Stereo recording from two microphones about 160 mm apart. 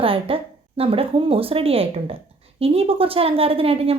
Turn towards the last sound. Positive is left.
turn(degrees=-35)  # may be behind; listen again after turning